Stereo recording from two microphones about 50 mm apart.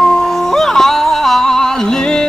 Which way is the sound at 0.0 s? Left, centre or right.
Centre.